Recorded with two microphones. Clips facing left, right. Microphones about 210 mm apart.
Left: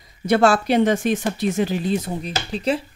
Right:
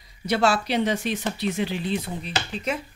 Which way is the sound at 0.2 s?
50° left (ahead or behind).